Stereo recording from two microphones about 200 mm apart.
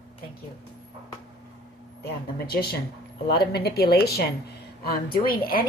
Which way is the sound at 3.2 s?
55° left (ahead or behind).